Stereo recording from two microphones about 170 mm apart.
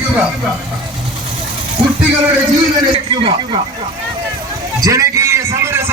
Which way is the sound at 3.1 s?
30° right (ahead or behind).